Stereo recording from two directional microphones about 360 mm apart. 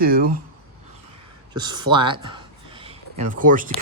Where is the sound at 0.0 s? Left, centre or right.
Right.